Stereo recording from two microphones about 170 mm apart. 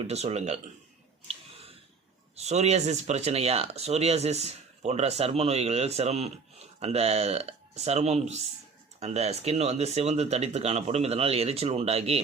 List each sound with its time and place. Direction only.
0.0 s speech: 40° right (ahead or behind)
2.3 s speech: 40° right (ahead or behind)